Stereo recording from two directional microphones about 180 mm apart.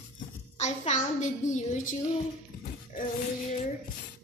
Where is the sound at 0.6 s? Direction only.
40° left (ahead or behind).